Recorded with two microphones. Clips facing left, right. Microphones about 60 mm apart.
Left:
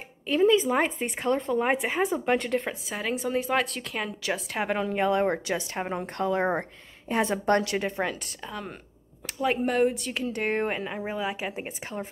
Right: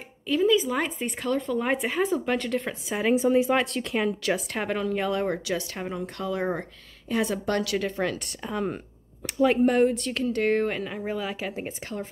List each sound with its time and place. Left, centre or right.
0.4 s a woman's voice: left; by 3.0 s centre
3.0 s a woman's voice: centre
4.6 s a woman's voice: centre
8.5 s speech: centre
9.2 s a woman's voice: centre; by 12.1 s left